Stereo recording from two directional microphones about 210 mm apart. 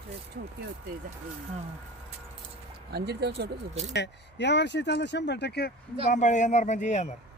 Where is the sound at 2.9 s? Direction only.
50° right (ahead or behind).